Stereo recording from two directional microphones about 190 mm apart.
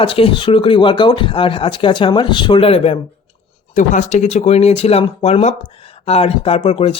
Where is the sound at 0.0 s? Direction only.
30° left (ahead or behind).